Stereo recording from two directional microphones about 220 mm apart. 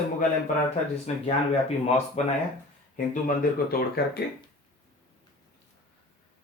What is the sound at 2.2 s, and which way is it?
Speech, 30° left (ahead or behind).